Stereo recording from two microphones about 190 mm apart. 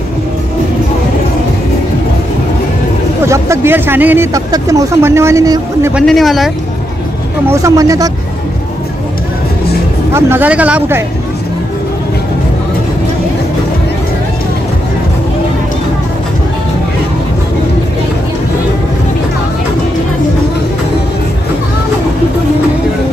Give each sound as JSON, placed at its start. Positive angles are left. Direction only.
{"t": 3.3, "sound": "speech", "side_deg": -15}
{"t": 6.0, "sound": "speech", "side_deg": 0}
{"t": 7.4, "sound": "speech", "side_deg": -15}
{"t": 10.1, "sound": "speech", "side_deg": -10}